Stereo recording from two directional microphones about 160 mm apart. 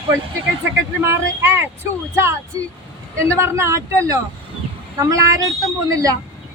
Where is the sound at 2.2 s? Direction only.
15° right (ahead or behind).